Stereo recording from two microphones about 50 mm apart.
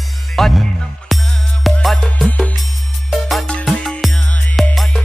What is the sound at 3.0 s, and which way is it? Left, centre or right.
Music, centre.